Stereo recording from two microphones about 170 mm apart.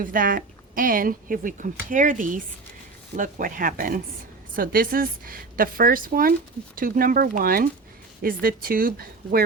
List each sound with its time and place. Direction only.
0.0 s a woman's voice: 55° right (ahead or behind)